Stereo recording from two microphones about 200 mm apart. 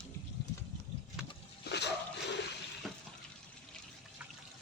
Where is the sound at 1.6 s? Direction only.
55° left (ahead or behind).